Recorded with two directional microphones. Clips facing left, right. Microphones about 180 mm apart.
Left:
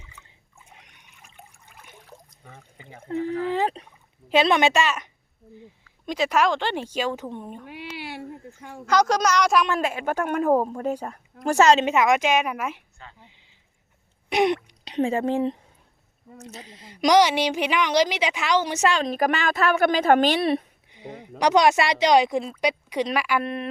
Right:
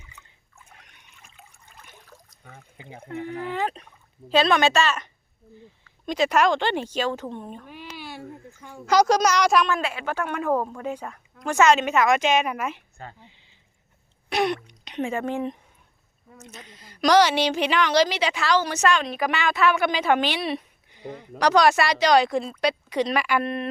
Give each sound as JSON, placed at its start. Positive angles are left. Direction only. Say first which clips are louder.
{"t": 0.6, "sound": "trickle", "louder": "left 1 dB", "side_deg": 15}
{"t": 1.5, "sound": "water", "louder": "left 1 dB", "side_deg": 10}
{"t": 2.4, "sound": "speech", "louder": "right 1 dB", "side_deg": 0}
{"t": 3.2, "sound": "a woman's voice", "louder": "left 3 dB", "side_deg": 30}
{"t": 7.7, "sound": "a sound", "louder": "left 3 dB", "side_deg": 75}
{"t": 8.9, "sound": "a woman's voice", "louder": "right 2 dB", "side_deg": -10}
{"t": 9.7, "sound": "a woman's voice", "louder": "left 3 dB", "side_deg": 45}
{"t": 12.2, "sound": "a woman's voice", "louder": "even", "side_deg": 10}
{"t": 13.1, "sound": "a sound", "louder": "right 1 dB", "side_deg": 15}
{"t": 14.3, "sound": "throat clearing", "louder": "left 3 dB", "side_deg": 20}
{"t": 14.8, "sound": "a woman's voice", "louder": "left 4 dB", "side_deg": 30}
{"t": 19.0, "sound": "a woman's voice", "louder": "left 2 dB", "side_deg": 45}
{"t": 20.9, "sound": "a woman's voice", "louder": "right 1 dB", "side_deg": 20}